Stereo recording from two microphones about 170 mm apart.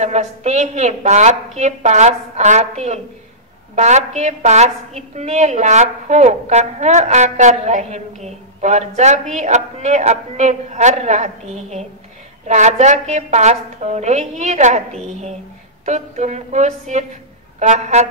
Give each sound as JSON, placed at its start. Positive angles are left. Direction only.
{"t": 0.0, "sound": "a woman's voice", "side_deg": -45}
{"t": 3.7, "sound": "a woman's voice", "side_deg": -45}